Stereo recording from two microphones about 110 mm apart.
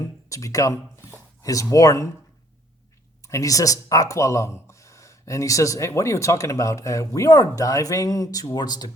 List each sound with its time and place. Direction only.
0.0 s a sound: 30° left (ahead or behind)
1.7 s speech: 30° left (ahead or behind)
3.2 s speech: 30° left (ahead or behind)